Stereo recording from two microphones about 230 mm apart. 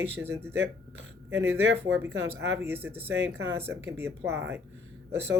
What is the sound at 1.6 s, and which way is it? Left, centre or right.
Speech, right.